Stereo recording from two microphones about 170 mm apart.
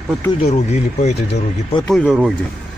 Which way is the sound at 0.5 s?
40° left (ahead or behind).